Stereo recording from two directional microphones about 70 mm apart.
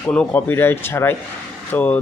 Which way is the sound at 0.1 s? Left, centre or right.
Left.